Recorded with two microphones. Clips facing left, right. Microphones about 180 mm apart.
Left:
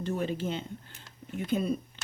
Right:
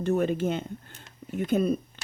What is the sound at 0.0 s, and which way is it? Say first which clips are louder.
Speech: right 6 dB; 50° right (ahead or behind).